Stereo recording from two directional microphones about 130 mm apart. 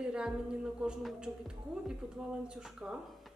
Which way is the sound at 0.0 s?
5° right (ahead or behind).